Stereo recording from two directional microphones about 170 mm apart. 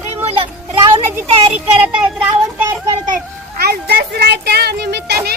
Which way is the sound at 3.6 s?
70° right (ahead or behind).